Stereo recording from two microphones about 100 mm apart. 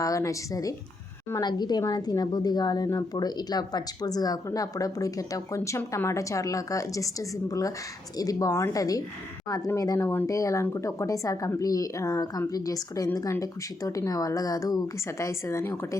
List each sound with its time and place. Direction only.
0.0 s a woman's voice: 35° left (ahead or behind)
1.4 s a woman's voice: 45° left (ahead or behind)
10.0 s a woman's voice: 25° left (ahead or behind)